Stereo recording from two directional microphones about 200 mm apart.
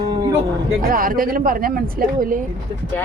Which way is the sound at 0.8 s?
45° right (ahead or behind).